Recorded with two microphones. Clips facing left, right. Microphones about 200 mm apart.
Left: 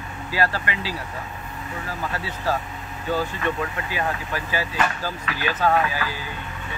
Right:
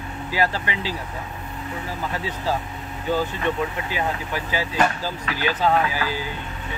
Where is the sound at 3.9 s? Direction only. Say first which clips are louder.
Even; 15° right (ahead or behind).